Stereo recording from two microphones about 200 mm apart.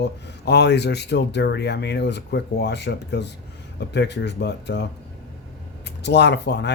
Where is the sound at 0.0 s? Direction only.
55° left (ahead or behind).